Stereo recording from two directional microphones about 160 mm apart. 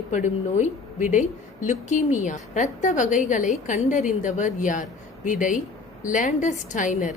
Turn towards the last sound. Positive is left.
turn(degrees=55)  # may be behind; listen again after turning